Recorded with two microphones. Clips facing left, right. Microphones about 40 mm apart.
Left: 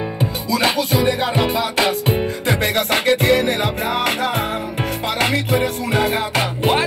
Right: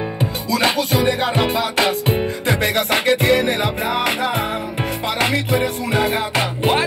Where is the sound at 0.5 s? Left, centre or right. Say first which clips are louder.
Even; right.